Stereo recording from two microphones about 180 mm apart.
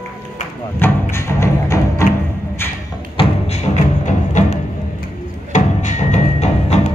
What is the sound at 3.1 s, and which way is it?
Music, 35° left (ahead or behind).